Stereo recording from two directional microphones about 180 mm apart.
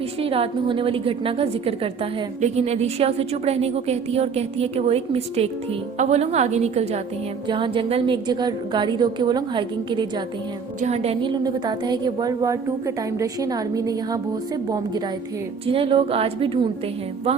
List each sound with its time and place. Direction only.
0.2 s a woman's voice: 30° right (ahead or behind)
10.8 s a woman's voice: 35° right (ahead or behind)
11.4 s a woman's voice: 25° right (ahead or behind)
15.6 s a woman's voice: 30° right (ahead or behind)